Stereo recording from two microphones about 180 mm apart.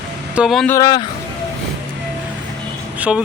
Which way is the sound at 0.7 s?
20° left (ahead or behind).